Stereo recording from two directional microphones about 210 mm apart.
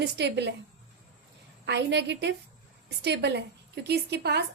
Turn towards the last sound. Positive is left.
turn(degrees=-50)  # may be behind; listen again after turning